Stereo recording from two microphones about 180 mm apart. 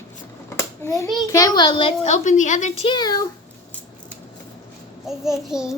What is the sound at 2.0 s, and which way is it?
Speech, 40° left (ahead or behind).